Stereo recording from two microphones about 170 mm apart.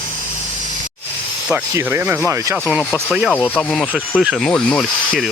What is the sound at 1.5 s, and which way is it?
Speech, 10° right (ahead or behind).